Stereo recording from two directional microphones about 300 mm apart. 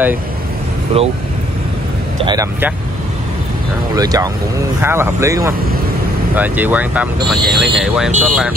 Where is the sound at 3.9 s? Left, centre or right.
Centre.